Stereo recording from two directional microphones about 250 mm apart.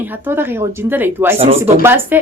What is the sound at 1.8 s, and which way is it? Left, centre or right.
Speech, centre.